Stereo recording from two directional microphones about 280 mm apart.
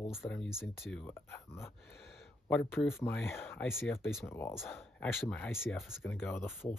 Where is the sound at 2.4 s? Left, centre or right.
Centre.